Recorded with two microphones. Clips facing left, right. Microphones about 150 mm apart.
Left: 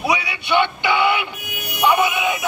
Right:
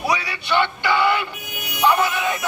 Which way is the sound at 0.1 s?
20° left (ahead or behind).